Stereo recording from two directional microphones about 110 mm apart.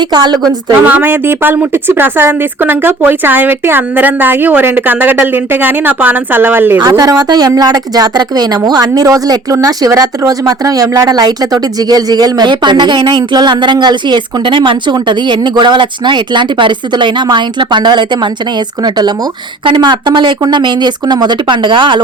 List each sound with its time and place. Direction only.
0.0 s a woman's voice: 40° right (ahead or behind)
0.9 s a woman's voice: 15° right (ahead or behind)
6.8 s a woman's voice: 30° right (ahead or behind)